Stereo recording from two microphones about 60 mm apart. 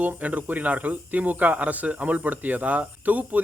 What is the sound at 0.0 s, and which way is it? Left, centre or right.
Speech, right.